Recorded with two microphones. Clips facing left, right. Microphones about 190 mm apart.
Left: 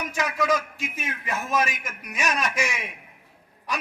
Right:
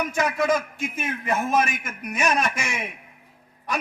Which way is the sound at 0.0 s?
55° right (ahead or behind).